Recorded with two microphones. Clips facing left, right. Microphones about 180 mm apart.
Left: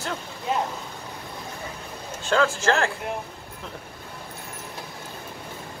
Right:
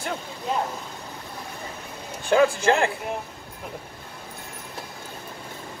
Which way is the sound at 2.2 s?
15° right (ahead or behind).